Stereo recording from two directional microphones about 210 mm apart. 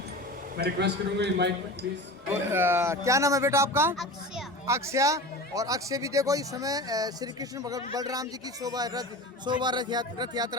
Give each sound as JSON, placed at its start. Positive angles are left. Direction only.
{"t": 0.5, "sound": "a man's voice", "side_deg": -50}
{"t": 2.5, "sound": "a man's voice", "side_deg": -10}
{"t": 3.9, "sound": "speech", "side_deg": 0}
{"t": 4.6, "sound": "a man's voice", "side_deg": -15}